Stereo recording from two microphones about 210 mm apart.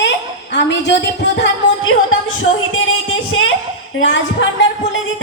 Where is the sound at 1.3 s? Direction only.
70° left (ahead or behind).